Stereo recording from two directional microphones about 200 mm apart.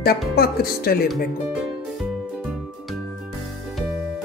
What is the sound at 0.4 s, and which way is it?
Speech, 50° left (ahead or behind).